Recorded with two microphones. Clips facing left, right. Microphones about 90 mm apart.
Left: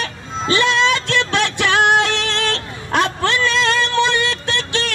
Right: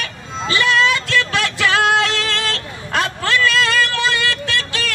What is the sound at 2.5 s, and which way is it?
Vehicle, 25° left (ahead or behind).